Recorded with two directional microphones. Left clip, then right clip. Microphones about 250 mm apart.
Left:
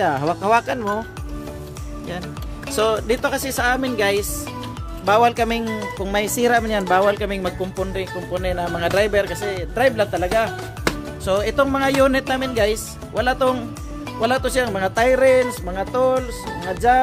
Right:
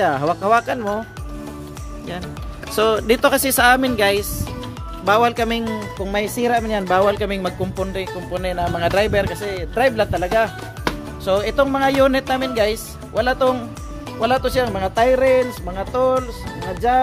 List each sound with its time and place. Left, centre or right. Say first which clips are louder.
0.0 s speech: right 2 dB; centre
2.7 s speech: right 2 dB; centre
3.2 s speech: right 6 dB; right
3.9 s speech: right 2 dB; centre